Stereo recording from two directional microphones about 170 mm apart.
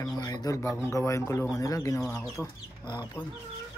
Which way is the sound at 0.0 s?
20° left (ahead or behind).